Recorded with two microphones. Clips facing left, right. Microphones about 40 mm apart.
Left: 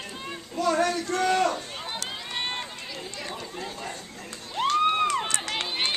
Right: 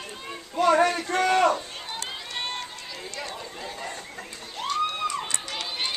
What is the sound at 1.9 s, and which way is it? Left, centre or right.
Run, centre.